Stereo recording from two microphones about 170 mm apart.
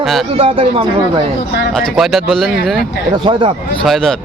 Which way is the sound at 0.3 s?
35° right (ahead or behind).